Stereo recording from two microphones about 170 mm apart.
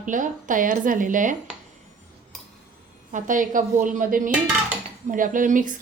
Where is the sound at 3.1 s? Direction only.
50° right (ahead or behind).